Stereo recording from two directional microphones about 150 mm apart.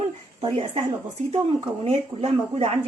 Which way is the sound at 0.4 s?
45° right (ahead or behind).